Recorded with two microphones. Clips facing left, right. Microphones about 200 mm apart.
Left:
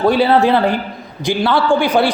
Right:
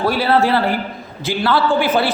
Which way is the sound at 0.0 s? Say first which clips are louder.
Left 4 dB; 20° left (ahead or behind).